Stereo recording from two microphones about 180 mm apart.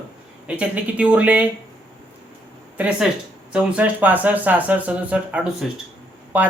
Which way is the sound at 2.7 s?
10° right (ahead or behind).